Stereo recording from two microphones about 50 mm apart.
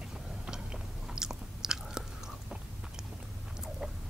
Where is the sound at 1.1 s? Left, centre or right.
Centre.